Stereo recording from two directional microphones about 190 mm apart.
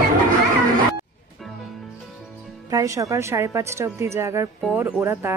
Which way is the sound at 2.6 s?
15° right (ahead or behind).